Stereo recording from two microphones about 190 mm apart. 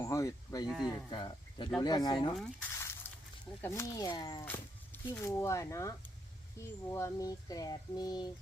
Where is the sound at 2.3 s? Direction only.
5° left (ahead or behind).